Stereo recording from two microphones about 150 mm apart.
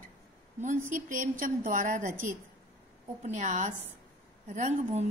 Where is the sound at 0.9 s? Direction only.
60° right (ahead or behind).